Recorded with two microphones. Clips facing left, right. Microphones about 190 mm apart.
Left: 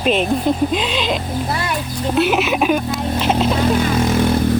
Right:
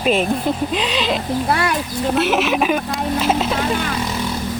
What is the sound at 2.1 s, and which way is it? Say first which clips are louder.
Speech: left 1 dB; centre (ahead or behind).